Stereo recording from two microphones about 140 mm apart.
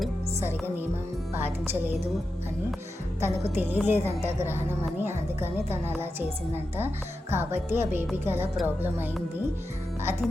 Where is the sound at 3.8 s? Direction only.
15° right (ahead or behind).